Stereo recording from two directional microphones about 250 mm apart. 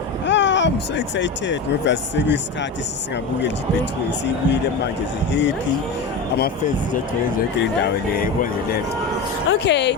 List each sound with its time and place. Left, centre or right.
0.3 s speech: left
5.3 s speech: left
7.3 s speech: left